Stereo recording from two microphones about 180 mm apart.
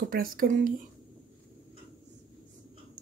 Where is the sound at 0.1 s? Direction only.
50° right (ahead or behind).